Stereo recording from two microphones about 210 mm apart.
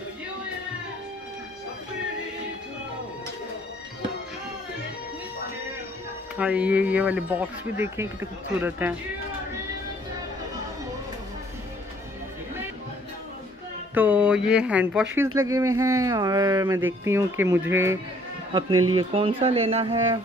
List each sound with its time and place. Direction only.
6.3 s speech: 5° right (ahead or behind)
13.9 s a sound: 5° right (ahead or behind)
15.3 s speech: 15° right (ahead or behind)
18.5 s speech: 20° right (ahead or behind)